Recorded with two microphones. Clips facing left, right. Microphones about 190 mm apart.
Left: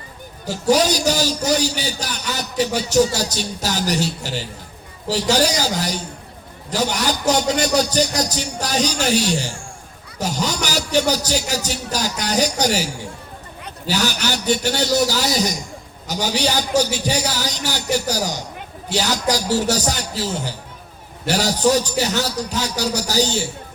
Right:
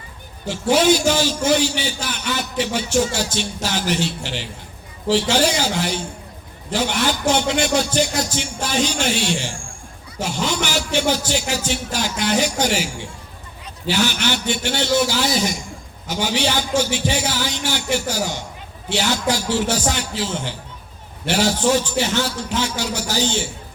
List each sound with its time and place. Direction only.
0.4 s a man's voice: 40° left (ahead or behind)